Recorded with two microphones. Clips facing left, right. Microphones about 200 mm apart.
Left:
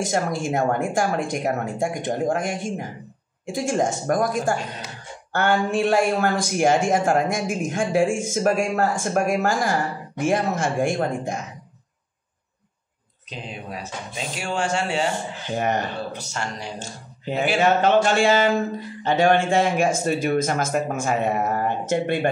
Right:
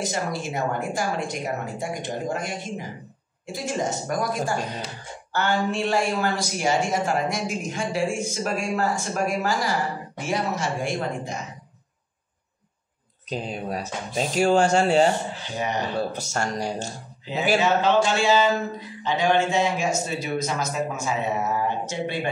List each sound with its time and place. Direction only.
0.0 s speech: 50° left (ahead or behind)
13.3 s speech: 40° right (ahead or behind)
15.5 s speech: 50° left (ahead or behind)
16.2 s speech: 45° right (ahead or behind)
17.2 s speech: 55° left (ahead or behind)